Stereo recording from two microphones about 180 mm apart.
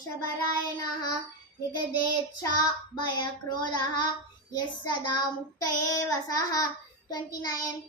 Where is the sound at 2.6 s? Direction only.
25° left (ahead or behind).